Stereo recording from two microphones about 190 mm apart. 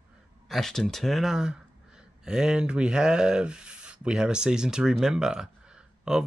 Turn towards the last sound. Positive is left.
turn(degrees=-5)  # may be behind; listen again after turning